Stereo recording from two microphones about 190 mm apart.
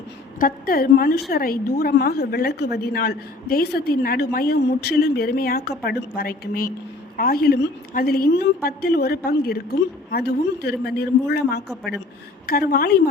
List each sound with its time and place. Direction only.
0.3 s a woman's voice: 50° left (ahead or behind)